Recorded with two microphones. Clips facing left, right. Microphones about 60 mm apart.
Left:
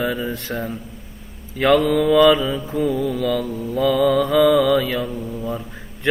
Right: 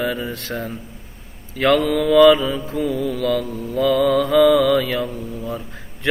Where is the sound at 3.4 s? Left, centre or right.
Centre.